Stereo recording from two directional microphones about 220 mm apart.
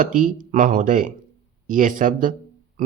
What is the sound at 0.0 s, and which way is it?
A woman's voice, 40° right (ahead or behind).